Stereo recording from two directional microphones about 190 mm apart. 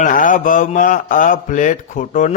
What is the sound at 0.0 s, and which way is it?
A man's voice, 45° left (ahead or behind).